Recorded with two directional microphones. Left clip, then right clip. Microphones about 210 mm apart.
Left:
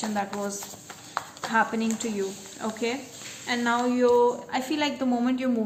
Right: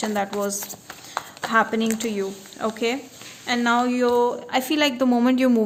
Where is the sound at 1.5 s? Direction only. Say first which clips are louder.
Right 5 dB; 50° right (ahead or behind).